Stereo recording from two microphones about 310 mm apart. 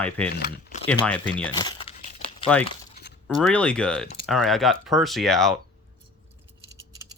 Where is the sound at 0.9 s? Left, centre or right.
Centre.